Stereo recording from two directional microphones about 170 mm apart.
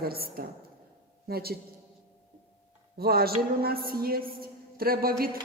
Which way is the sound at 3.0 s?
65° right (ahead or behind).